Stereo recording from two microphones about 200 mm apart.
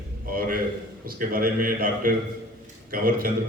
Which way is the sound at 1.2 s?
45° right (ahead or behind).